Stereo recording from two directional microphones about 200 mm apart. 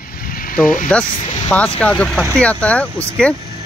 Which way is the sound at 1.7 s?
5° left (ahead or behind).